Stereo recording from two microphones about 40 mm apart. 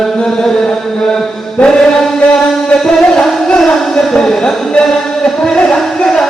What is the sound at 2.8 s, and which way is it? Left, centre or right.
Music, centre.